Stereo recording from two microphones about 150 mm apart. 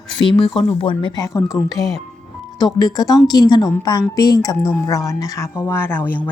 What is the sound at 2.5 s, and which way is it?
A woman's voice, 25° left (ahead or behind).